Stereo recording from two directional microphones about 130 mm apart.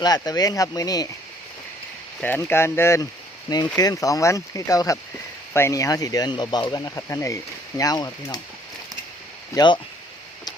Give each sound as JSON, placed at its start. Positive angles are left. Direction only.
{"t": 0.0, "sound": "speech", "side_deg": 30}
{"t": 2.2, "sound": "speech", "side_deg": 15}
{"t": 9.6, "sound": "speech", "side_deg": 35}